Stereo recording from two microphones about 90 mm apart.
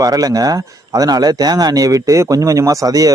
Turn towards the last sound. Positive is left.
turn(degrees=-40)  # may be behind; listen again after turning